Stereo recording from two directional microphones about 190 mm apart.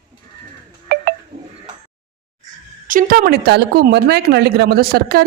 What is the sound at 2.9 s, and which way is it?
A woman's voice, 45° right (ahead or behind).